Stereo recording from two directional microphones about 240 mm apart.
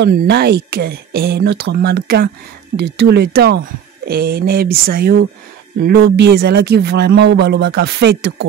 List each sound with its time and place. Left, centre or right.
0.0 s speech: right